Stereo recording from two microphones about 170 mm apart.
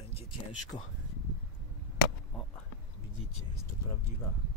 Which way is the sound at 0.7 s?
25° left (ahead or behind).